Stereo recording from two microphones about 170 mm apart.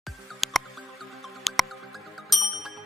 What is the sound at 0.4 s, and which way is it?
Music, centre (ahead or behind).